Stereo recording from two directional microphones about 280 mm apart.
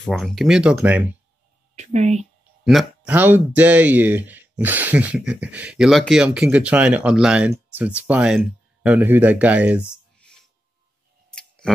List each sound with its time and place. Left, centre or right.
0.0 s speech: centre
1.8 s speech: right
2.6 s speech: centre
11.3 s a sound: centre